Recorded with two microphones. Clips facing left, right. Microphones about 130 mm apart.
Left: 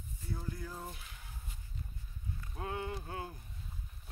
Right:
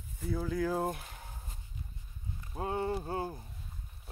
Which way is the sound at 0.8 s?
50° right (ahead or behind).